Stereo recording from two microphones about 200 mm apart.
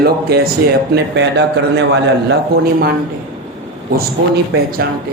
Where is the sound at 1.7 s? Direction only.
60° right (ahead or behind).